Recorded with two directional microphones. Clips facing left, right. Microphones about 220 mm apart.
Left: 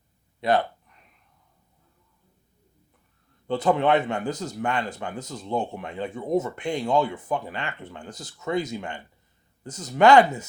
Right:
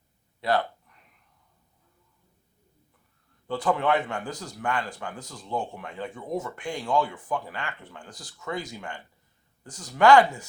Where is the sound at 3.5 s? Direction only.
20° left (ahead or behind).